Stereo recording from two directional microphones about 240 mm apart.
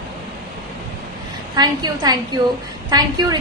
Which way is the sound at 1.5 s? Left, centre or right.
Centre.